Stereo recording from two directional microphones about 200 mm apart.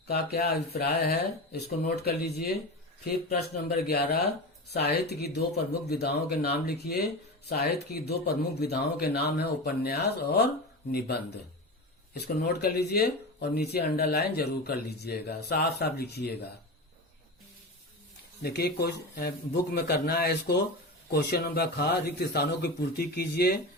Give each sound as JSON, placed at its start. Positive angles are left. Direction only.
{"t": 0.1, "sound": "speech", "side_deg": 55}
{"t": 12.1, "sound": "speech", "side_deg": 50}
{"t": 18.4, "sound": "speech", "side_deg": 55}